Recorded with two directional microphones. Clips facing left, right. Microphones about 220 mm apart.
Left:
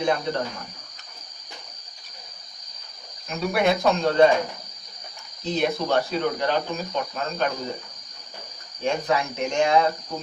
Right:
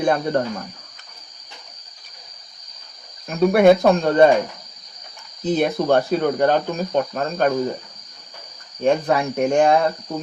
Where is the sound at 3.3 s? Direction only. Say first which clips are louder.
Right 9 dB; 55° right (ahead or behind).